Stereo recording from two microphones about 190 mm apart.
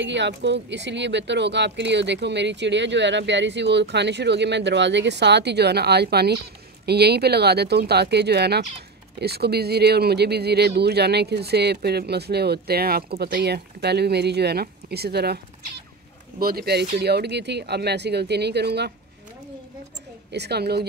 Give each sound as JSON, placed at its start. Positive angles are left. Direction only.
{"t": 0.0, "sound": "speech", "side_deg": -70}
{"t": 20.3, "sound": "speech", "side_deg": -60}